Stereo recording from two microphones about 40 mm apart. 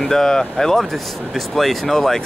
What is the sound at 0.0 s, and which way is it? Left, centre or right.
Speech, centre.